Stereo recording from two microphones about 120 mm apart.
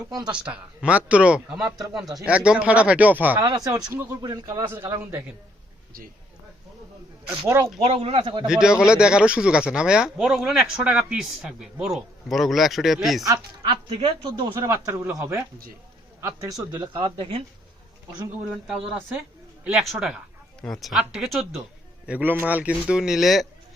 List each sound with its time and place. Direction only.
0.1 s speech: 35° right (ahead or behind)
0.3 s a man's voice: 10° right (ahead or behind)
3.3 s speech: 35° right (ahead or behind)
3.9 s a man's voice: 20° right (ahead or behind)
4.2 s a man's voice: 35° right (ahead or behind)
7.8 s speech: 55° right (ahead or behind)
8.4 s a man's voice: 5° right (ahead or behind)
13.9 s speech: 50° right (ahead or behind)
14.7 s a man's voice: 15° right (ahead or behind); by 17.4 s 45° right (ahead or behind)
19.8 s speech: centre (ahead or behind)
22.0 s a man's voice: 15° right (ahead or behind)